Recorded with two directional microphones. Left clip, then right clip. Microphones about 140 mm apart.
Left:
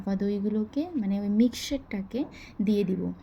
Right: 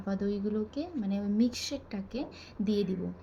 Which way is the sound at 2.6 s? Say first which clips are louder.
Left 4 dB; 20° left (ahead or behind).